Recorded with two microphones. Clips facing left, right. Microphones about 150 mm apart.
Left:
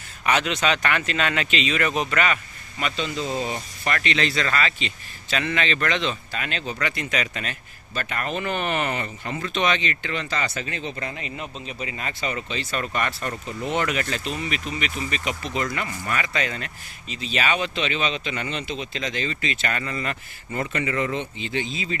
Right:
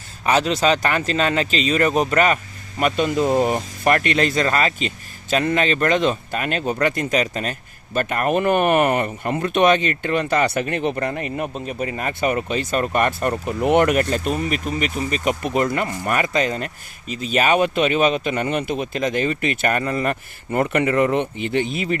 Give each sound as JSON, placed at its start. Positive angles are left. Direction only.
{"t": 0.3, "sound": "speech", "side_deg": -35}